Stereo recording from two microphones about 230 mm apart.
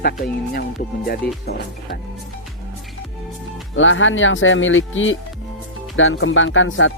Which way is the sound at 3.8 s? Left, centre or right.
Left.